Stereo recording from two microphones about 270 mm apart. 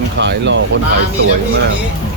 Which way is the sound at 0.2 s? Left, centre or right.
Right.